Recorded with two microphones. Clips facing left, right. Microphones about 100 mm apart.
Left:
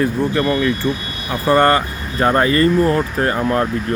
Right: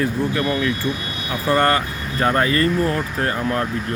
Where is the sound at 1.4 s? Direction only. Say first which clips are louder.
Left 4 dB; 20° left (ahead or behind).